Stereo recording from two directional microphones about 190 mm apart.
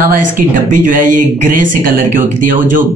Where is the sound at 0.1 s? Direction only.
45° right (ahead or behind).